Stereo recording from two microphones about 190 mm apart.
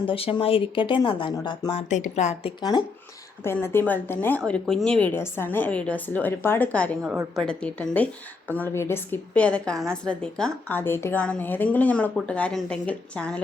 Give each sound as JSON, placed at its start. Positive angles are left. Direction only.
{"t": 0.0, "sound": "speech", "side_deg": 30}
{"t": 1.9, "sound": "a woman's voice", "side_deg": 40}
{"t": 3.4, "sound": "a woman's voice", "side_deg": 10}